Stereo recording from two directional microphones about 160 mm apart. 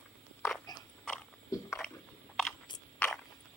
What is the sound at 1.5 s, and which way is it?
Biting, 20° left (ahead or behind).